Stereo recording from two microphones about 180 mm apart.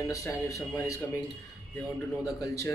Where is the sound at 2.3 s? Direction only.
20° left (ahead or behind).